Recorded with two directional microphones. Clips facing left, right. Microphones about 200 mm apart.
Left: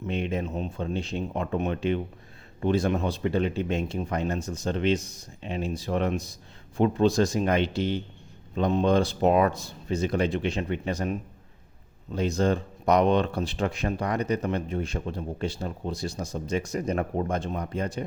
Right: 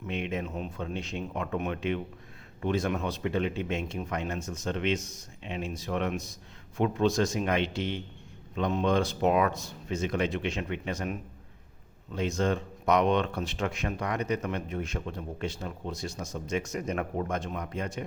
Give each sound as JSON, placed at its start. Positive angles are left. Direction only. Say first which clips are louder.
{"t": 0.1, "sound": "speech", "louder": "left 3 dB", "side_deg": 35}